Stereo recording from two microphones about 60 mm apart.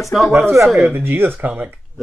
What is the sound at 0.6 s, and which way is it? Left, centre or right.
Speech, centre.